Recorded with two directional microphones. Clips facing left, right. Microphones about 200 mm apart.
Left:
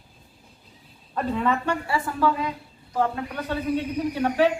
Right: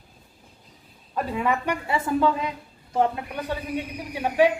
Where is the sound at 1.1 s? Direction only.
10° right (ahead or behind).